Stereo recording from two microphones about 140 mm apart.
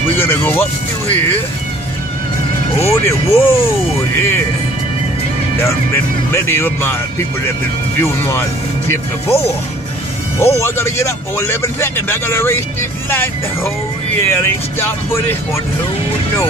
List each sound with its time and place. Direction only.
0.1 s speech: 15° left (ahead or behind)
2.9 s speech: 20° left (ahead or behind)
6.3 s speech: 15° left (ahead or behind)
8.0 s speech: 15° left (ahead or behind)
10.4 s speech: 20° left (ahead or behind)
14.2 s speech: 20° left (ahead or behind)